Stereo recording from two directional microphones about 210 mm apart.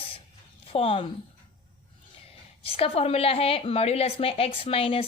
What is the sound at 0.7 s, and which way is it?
Speech, 25° left (ahead or behind).